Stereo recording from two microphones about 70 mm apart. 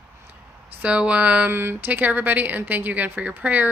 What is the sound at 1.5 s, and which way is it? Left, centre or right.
Speech, right.